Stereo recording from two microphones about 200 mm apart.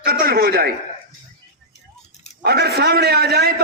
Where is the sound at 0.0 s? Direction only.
50° right (ahead or behind).